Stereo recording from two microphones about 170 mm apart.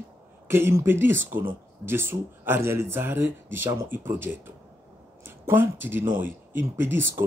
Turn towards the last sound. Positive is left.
turn(degrees=-15)  # may be behind; listen again after turning